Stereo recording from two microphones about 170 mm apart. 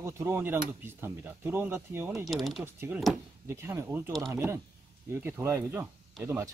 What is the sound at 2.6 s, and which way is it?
Speech, 15° right (ahead or behind).